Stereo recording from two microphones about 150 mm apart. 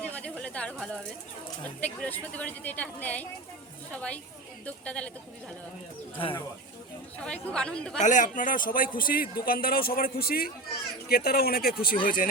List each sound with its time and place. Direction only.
0.0 s a sound: 10° left (ahead or behind)
1.8 s a woman's voice: 10° left (ahead or behind)
7.3 s a woman's voice: 10° left (ahead or behind)
7.9 s a man's voice: 55° left (ahead or behind); by 11.9 s 85° left
12.0 s speech: 65° left (ahead or behind)